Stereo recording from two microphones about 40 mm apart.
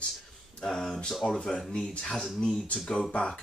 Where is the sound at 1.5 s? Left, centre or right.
Left.